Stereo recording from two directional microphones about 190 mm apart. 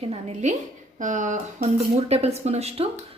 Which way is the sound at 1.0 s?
40° right (ahead or behind).